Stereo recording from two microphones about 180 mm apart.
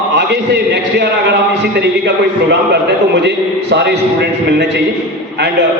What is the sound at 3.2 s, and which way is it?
Speech, 70° right (ahead or behind).